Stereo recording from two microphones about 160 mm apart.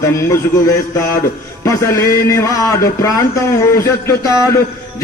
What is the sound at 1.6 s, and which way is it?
A man's voice, 20° left (ahead or behind).